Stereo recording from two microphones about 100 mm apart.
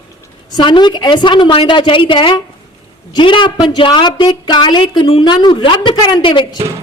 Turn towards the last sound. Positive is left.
turn(degrees=55)  # may be behind; listen again after turning